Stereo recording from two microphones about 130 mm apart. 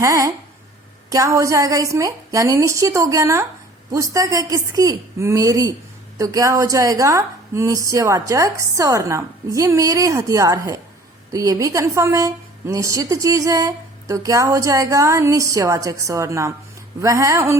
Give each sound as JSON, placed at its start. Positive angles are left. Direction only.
{"t": 0.0, "sound": "a woman's voice", "side_deg": -25}